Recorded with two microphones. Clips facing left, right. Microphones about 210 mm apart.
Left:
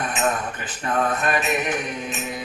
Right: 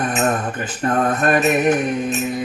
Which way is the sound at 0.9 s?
45° right (ahead or behind).